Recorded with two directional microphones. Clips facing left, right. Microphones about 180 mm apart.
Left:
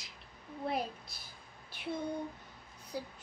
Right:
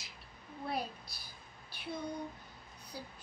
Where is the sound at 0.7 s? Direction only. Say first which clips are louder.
Left 1 dB; 25° left (ahead or behind).